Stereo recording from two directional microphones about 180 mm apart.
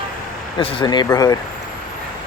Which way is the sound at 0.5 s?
25° left (ahead or behind).